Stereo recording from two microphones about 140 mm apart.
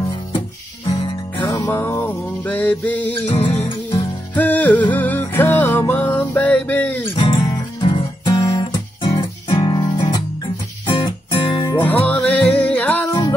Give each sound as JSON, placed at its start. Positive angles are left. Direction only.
{"t": 1.5, "sound": "music", "side_deg": 20}
{"t": 3.3, "sound": "music", "side_deg": 35}
{"t": 4.4, "sound": "music", "side_deg": 10}
{"t": 7.1, "sound": "guitar", "side_deg": 40}
{"t": 10.9, "sound": "music", "side_deg": 35}
{"t": 11.8, "sound": "music", "side_deg": 10}